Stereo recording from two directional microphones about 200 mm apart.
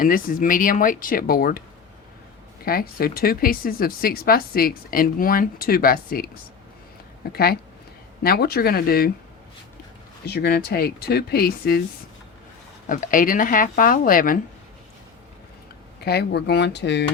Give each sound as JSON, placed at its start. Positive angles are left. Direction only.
{"t": 0.0, "sound": "speech", "side_deg": 45}
{"t": 2.6, "sound": "speech", "side_deg": 50}
{"t": 7.3, "sound": "speech", "side_deg": 50}
{"t": 10.2, "sound": "speech", "side_deg": 50}
{"t": 12.9, "sound": "speech", "side_deg": 40}
{"t": 16.0, "sound": "speech", "side_deg": 55}